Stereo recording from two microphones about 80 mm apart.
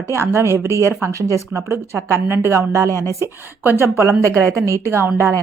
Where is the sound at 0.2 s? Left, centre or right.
Right.